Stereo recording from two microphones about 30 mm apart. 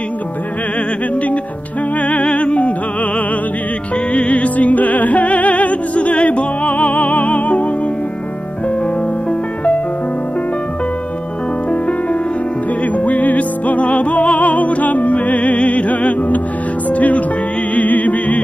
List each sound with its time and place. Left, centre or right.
2.0 s music: left
4.1 s music: left
12.8 s music: left